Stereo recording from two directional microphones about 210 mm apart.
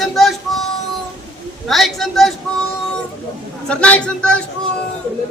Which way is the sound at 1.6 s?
Centre (ahead or behind).